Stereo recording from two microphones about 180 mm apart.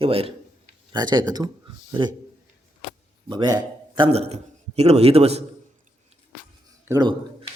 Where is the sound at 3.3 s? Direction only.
25° right (ahead or behind).